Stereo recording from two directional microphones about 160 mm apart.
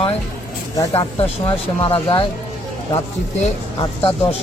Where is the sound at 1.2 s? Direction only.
35° left (ahead or behind).